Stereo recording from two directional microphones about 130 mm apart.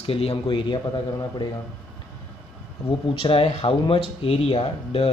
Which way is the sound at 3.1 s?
45° left (ahead or behind).